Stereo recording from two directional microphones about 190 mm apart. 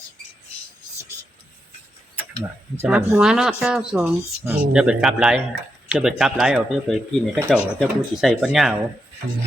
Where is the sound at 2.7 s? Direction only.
10° right (ahead or behind).